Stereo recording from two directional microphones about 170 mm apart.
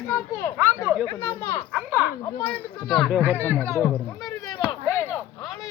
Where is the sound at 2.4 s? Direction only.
5° left (ahead or behind).